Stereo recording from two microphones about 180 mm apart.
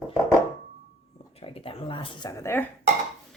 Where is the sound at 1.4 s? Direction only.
30° left (ahead or behind); by 2.6 s 15° left (ahead or behind).